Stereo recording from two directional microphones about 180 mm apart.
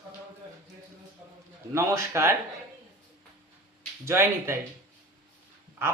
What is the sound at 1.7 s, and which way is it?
Speech, 15° right (ahead or behind).